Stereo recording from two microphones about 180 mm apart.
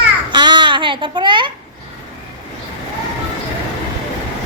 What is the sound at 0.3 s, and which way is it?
Babbling, 25° right (ahead or behind).